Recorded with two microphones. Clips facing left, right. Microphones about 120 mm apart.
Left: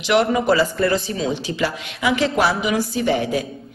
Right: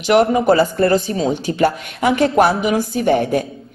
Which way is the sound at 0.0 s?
40° right (ahead or behind).